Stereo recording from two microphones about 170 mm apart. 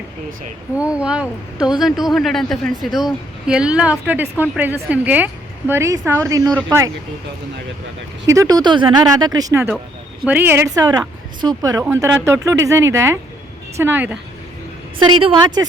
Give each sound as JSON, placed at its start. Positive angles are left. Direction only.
{"t": 0.8, "sound": "speech", "side_deg": -5}
{"t": 8.3, "sound": "speech", "side_deg": -20}
{"t": 14.9, "sound": "speech", "side_deg": -30}